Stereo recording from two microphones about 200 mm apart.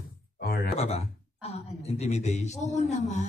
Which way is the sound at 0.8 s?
30° left (ahead or behind).